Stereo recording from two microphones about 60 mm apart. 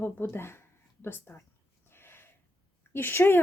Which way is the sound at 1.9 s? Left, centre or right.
Left.